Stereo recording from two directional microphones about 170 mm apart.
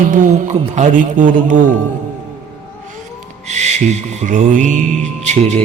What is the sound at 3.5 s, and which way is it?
A man's voice, 40° right (ahead or behind).